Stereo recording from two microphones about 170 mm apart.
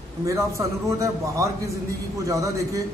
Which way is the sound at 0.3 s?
20° right (ahead or behind).